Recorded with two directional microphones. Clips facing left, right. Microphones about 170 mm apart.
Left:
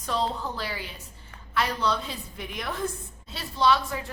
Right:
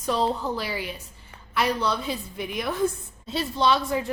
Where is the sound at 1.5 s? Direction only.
10° right (ahead or behind).